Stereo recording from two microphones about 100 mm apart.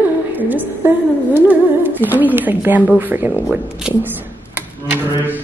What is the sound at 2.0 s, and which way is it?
Speech, 20° right (ahead or behind).